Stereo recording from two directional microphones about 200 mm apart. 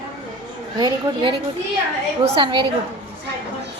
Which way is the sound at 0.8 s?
25° right (ahead or behind).